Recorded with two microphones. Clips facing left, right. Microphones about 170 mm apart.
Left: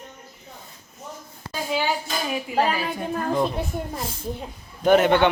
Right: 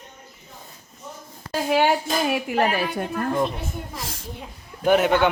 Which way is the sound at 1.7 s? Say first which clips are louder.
Right 5 dB; 65° right (ahead or behind).